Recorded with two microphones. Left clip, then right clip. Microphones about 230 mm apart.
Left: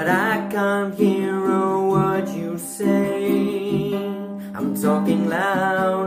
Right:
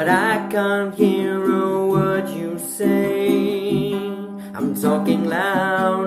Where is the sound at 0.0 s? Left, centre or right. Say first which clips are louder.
Right 2 dB; centre.